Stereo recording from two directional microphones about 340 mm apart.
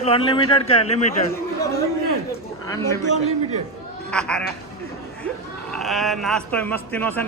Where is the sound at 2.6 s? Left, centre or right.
Centre.